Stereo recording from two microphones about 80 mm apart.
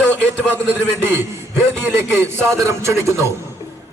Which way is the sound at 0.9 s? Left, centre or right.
Right.